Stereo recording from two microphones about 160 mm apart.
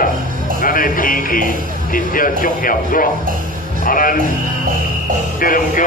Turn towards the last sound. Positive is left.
turn(degrees=60)  # may be behind; listen again after turning